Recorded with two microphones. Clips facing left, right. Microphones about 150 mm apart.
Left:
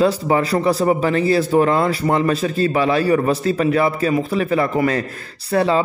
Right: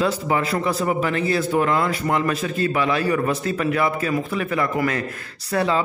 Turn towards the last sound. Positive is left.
turn(degrees=30)  # may be behind; listen again after turning